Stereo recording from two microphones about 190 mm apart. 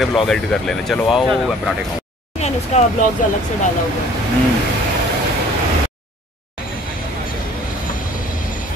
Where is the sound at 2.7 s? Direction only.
35° left (ahead or behind).